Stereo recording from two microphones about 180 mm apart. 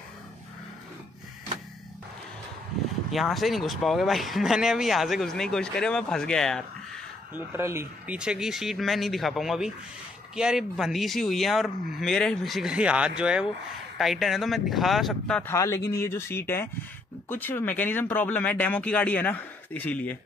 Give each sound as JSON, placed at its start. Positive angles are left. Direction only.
{"t": 3.1, "sound": "speech", "side_deg": 0}
{"t": 7.3, "sound": "speech", "side_deg": -15}
{"t": 15.5, "sound": "speech", "side_deg": 15}